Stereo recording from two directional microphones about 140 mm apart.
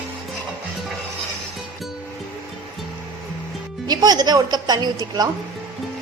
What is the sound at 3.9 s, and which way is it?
A woman's voice, 30° right (ahead or behind).